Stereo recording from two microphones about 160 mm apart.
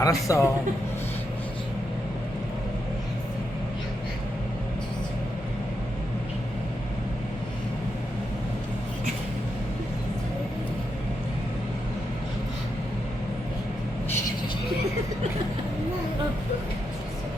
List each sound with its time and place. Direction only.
0.0 s speech: 20° left (ahead or behind)